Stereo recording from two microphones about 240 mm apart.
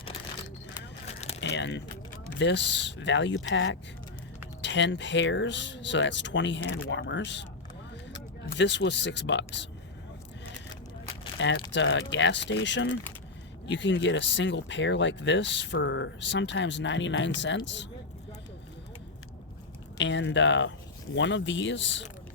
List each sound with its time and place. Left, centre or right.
0.7 s a sound: left
1.4 s a sound: left
2.4 s speech: left
8.5 s speech: left
11.3 s speech: left
20.0 s speech: left